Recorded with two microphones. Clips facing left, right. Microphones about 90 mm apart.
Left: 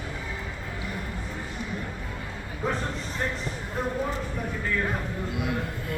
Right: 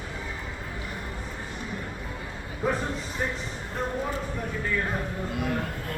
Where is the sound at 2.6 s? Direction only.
5° right (ahead or behind).